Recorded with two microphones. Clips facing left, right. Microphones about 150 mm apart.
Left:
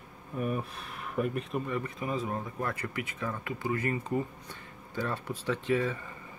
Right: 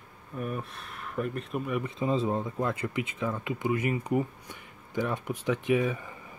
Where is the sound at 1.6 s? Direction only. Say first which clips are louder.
Right 2 dB; 15° right (ahead or behind).